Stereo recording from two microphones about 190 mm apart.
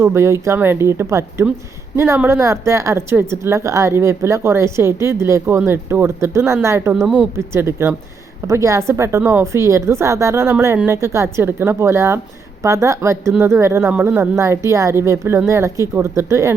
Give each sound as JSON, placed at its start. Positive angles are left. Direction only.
{"t": 0.0, "sound": "a woman's voice", "side_deg": -15}
{"t": 6.9, "sound": "a woman's voice", "side_deg": -5}